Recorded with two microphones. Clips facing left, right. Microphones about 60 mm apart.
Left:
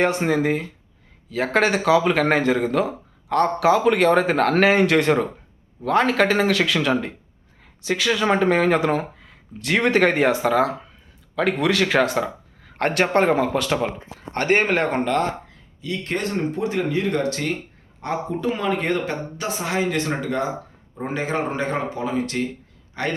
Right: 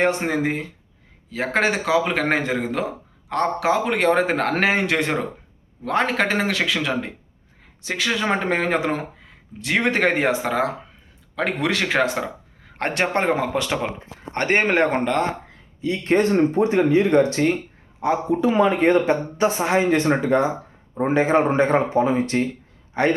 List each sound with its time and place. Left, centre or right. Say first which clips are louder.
0.0 s speech: left 1 dB; right
7.8 s speech: left 2 dB; right; by 13.9 s centre
14.3 s speech: even; right
18.0 s a man's voice: right 6 dB; centre
18.3 s speech: right 5 dB; centre